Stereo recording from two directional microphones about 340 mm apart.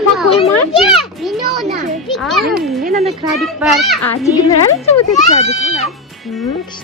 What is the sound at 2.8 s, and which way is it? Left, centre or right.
Speech, right.